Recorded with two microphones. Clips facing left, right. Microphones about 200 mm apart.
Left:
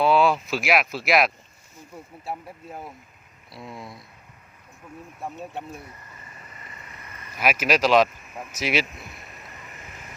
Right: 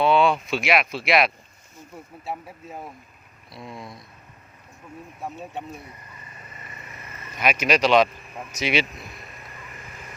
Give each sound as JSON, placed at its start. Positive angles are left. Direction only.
{"t": 0.0, "sound": "speech", "side_deg": 0}
{"t": 6.2, "sound": "vehicle", "side_deg": -20}
{"t": 7.3, "sound": "speech", "side_deg": 5}